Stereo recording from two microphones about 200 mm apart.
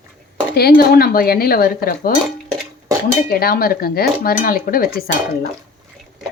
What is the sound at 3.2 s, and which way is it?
Speech, 50° left (ahead or behind).